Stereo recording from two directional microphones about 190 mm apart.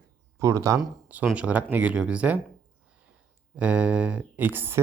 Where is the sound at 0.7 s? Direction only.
5° right (ahead or behind).